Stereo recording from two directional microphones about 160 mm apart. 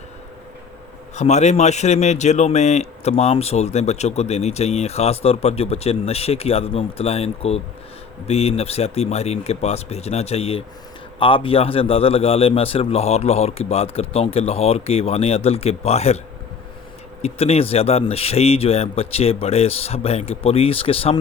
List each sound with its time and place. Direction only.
1.1 s speech: 45° left (ahead or behind)
17.2 s speech: 40° left (ahead or behind)